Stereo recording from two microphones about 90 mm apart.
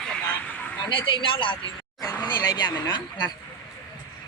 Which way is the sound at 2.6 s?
50° left (ahead or behind).